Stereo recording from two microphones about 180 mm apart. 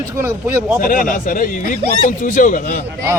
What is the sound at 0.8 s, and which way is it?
A man's voice, 50° left (ahead or behind).